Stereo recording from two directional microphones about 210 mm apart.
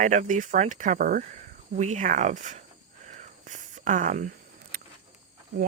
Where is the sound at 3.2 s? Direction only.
35° right (ahead or behind).